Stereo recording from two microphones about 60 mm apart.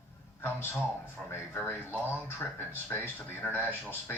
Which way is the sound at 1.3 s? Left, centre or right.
Left.